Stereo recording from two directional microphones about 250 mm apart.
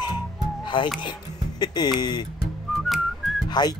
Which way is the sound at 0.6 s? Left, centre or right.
Centre.